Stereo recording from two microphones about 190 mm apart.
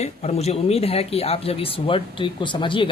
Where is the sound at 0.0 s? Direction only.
35° left (ahead or behind).